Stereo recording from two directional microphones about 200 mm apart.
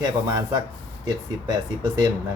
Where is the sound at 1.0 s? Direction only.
20° right (ahead or behind).